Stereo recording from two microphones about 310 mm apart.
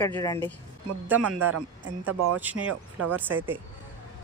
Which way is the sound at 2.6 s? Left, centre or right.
Right.